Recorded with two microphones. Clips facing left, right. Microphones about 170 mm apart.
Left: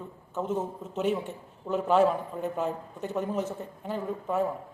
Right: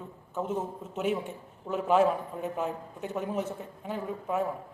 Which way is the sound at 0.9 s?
5° right (ahead or behind).